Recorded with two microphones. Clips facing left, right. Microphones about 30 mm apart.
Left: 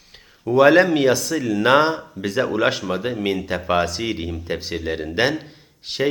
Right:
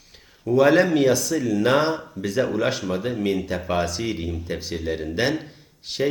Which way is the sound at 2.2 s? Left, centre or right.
Left.